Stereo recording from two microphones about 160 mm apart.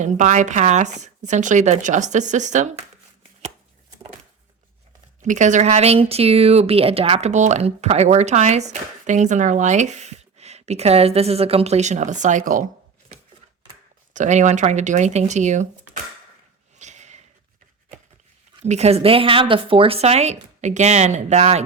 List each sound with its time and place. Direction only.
0.0 s speech: 50° right (ahead or behind)
5.2 s speech: 50° right (ahead or behind)
14.1 s speech: 50° right (ahead or behind)
16.7 s a sound: 45° right (ahead or behind)
18.6 s speech: 45° right (ahead or behind)